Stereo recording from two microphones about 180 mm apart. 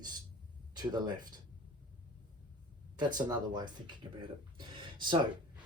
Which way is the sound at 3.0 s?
25° right (ahead or behind).